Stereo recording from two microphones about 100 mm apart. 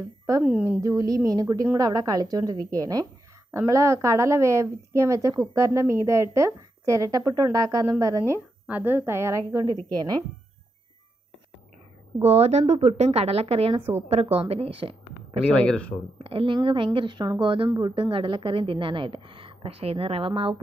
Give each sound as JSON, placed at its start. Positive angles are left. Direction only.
{"t": 0.4, "sound": "a woman's voice", "side_deg": -15}
{"t": 0.7, "sound": "a woman's voice", "side_deg": -35}
{"t": 8.6, "sound": "a woman's voice", "side_deg": -20}
{"t": 9.8, "sound": "a woman's voice", "side_deg": -40}
{"t": 12.2, "sound": "a woman's voice", "side_deg": -90}
{"t": 14.2, "sound": "a woman's voice", "side_deg": -90}
{"t": 14.5, "sound": "a woman's voice", "side_deg": -70}
{"t": 15.5, "sound": "speech", "side_deg": 10}
{"t": 16.2, "sound": "a woman's voice", "side_deg": -65}